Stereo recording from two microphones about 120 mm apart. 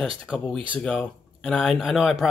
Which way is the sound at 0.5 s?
45° right (ahead or behind).